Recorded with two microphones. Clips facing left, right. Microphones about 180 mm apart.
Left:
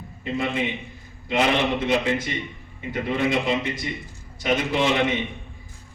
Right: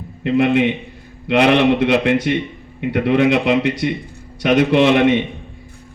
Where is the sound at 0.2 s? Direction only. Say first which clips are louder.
Right 11 dB; 65° right (ahead or behind).